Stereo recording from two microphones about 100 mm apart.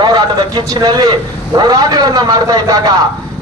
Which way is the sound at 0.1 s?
40° right (ahead or behind).